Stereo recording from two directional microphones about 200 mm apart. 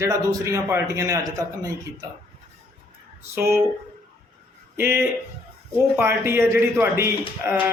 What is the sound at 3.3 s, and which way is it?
Speech, 10° right (ahead or behind).